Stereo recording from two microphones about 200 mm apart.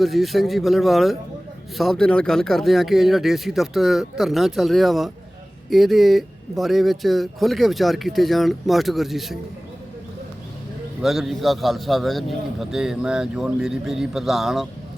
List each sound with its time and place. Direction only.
0.0 s speech: centre (ahead or behind)
11.0 s speech: centre (ahead or behind)